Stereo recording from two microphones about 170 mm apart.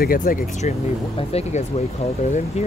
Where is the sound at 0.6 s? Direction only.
50° left (ahead or behind).